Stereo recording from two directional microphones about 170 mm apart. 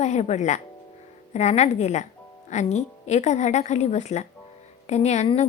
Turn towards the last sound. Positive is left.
turn(degrees=40)  # may be behind; listen again after turning